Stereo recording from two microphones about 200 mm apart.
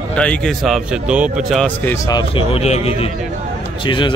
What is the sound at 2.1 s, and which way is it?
Speech, 25° left (ahead or behind).